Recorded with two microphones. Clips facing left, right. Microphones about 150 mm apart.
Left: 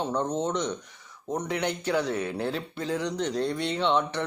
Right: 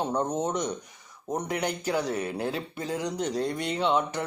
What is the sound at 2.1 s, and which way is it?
Speech, 10° right (ahead or behind).